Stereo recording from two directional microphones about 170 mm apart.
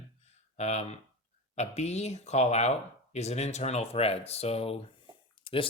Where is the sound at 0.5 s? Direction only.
40° left (ahead or behind).